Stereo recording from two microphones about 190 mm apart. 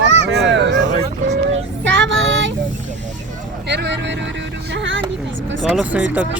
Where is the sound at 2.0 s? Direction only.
80° right.